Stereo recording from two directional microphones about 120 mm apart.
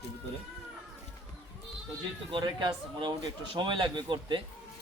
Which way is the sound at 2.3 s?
40° right (ahead or behind).